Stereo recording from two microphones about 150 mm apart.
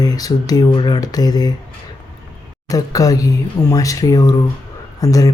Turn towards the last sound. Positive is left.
turn(degrees=25)  # may be behind; listen again after turning